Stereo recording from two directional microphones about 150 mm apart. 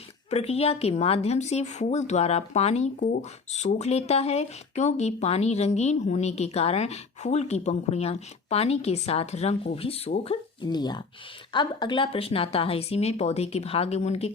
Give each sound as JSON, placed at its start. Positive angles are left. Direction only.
{"t": 0.3, "sound": "speech", "side_deg": 45}
{"t": 10.2, "sound": "speech", "side_deg": 30}